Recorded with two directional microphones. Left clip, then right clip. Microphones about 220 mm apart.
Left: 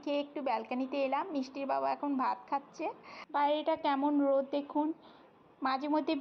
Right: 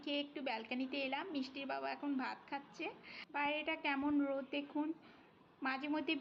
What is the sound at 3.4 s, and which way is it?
Speech, 90° left.